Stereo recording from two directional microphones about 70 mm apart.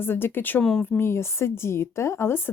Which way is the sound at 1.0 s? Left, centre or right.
Left.